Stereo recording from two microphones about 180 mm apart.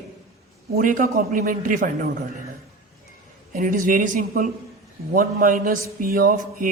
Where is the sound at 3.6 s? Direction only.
50° right (ahead or behind).